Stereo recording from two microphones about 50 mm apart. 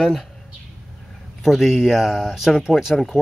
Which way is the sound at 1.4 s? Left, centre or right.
Centre.